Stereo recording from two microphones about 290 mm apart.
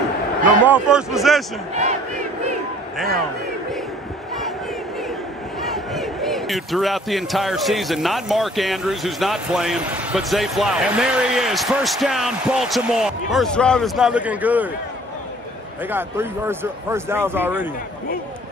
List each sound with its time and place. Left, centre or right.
0.7 s a man's voice: centre
1.7 s battle cry: right
5.6 s a man's voice: centre
15.9 s speech: centre